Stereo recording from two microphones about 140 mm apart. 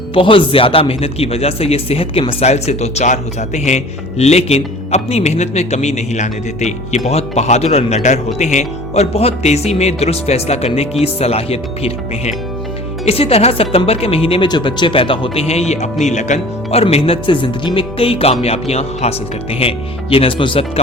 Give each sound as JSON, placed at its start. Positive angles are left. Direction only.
{"t": 0.1, "sound": "a man's voice", "side_deg": 40}